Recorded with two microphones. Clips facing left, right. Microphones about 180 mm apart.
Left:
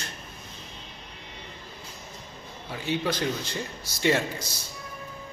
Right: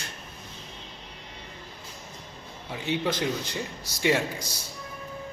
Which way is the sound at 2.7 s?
20° right (ahead or behind).